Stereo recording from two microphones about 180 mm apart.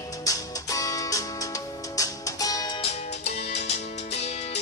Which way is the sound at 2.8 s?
40° left (ahead or behind).